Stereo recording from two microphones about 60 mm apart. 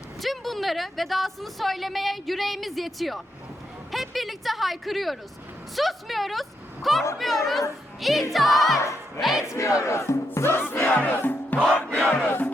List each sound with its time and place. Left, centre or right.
0.2 s a woman's voice: centre
8.8 s crowd: left
9.6 s battle cry: left
10.9 s music: left
11.5 s crowd: centre